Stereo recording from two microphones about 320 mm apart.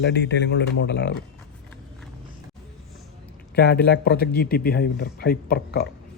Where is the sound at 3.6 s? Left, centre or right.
Left.